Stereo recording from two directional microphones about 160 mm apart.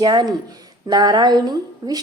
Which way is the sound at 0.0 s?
25° right (ahead or behind).